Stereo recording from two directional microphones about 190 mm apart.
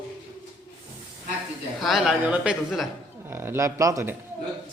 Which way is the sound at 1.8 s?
Centre (ahead or behind).